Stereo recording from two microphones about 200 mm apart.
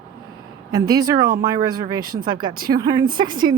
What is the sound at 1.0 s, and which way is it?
Speech, 20° right (ahead or behind).